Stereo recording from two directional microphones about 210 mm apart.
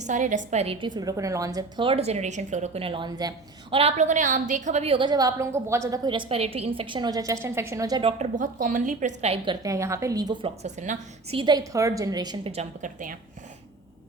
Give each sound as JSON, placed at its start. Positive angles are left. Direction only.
{"t": 0.0, "sound": "a woman's voice", "side_deg": -35}
{"t": 8.2, "sound": "a woman's voice", "side_deg": -40}
{"t": 9.6, "sound": "a woman's voice", "side_deg": -15}
{"t": 10.6, "sound": "a woman's voice", "side_deg": -30}